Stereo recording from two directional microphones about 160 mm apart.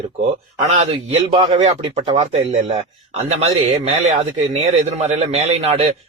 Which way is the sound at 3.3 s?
40° right (ahead or behind).